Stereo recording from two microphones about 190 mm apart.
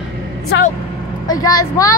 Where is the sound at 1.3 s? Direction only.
20° left (ahead or behind).